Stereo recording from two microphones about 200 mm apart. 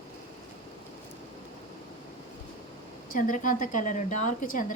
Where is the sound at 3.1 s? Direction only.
40° left (ahead or behind).